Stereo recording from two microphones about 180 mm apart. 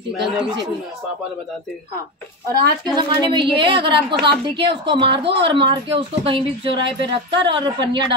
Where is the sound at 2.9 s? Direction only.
25° right (ahead or behind).